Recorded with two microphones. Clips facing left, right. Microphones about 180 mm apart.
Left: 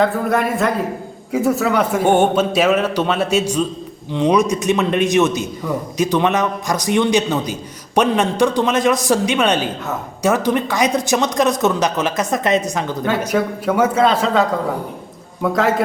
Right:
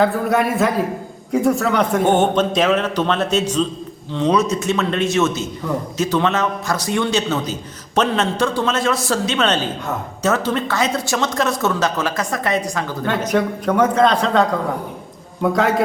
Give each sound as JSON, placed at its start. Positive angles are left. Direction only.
{"t": 0.0, "sound": "a man's voice", "side_deg": 0}
{"t": 13.1, "sound": "a man's voice", "side_deg": 5}